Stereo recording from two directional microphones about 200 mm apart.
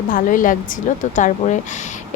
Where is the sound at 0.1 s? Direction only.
40° left (ahead or behind).